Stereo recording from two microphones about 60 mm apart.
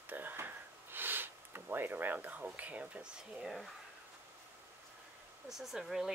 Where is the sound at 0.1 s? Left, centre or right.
Right; by 3.3 s centre.